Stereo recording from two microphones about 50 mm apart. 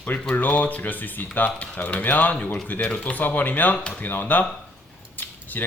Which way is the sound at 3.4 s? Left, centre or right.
Left.